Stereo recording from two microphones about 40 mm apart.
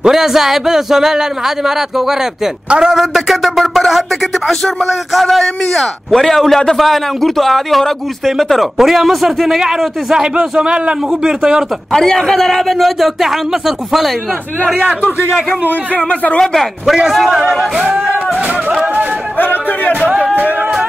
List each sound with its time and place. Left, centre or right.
0.0 s speech: centre
3.1 s a man's voice: centre
8.7 s speech: centre
10.6 s a man's voice: right
11.9 s a man's voice: centre
15.1 s a man's voice: left
16.0 s speech: left
17.1 s a man's voice: centre
19.3 s speech: left